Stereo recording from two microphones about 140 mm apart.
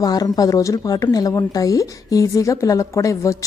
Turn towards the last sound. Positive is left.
turn(degrees=20)  # may be behind; listen again after turning